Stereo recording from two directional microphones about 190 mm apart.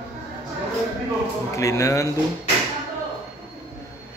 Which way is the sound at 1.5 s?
15° left (ahead or behind).